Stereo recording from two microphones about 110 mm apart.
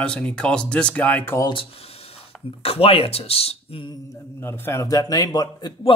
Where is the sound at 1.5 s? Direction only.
55° left (ahead or behind).